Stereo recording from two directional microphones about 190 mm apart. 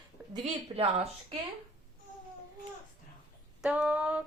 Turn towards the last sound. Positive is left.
turn(degrees=-5)  # may be behind; listen again after turning